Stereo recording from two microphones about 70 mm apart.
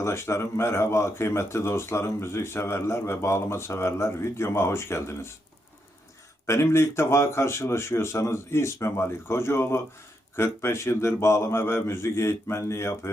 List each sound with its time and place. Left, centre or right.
0.0 s speech: left
6.4 s speech: left